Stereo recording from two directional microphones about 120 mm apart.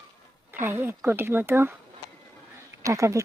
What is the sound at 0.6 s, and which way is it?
Speech, 20° right (ahead or behind).